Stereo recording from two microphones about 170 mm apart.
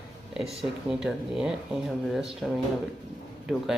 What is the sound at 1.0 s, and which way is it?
Speech, 5° right (ahead or behind).